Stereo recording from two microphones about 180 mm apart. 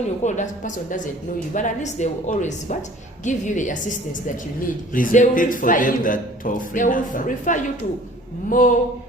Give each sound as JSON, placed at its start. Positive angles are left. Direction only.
{"t": 0.3, "sound": "a man's voice", "side_deg": 45}